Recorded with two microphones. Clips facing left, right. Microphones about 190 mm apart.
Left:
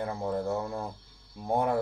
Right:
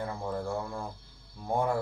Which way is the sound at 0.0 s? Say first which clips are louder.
Left 3 dB; 20° left (ahead or behind).